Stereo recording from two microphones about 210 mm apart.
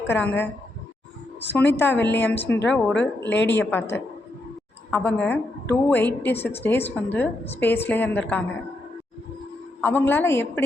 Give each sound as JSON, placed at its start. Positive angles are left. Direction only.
{"t": 0.1, "sound": "a woman's voice", "side_deg": 10}
{"t": 3.3, "sound": "a woman's voice", "side_deg": 55}
{"t": 3.6, "sound": "a woman's voice", "side_deg": 10}
{"t": 4.9, "sound": "a woman's voice", "side_deg": 5}
{"t": 9.8, "sound": "a woman's voice", "side_deg": 10}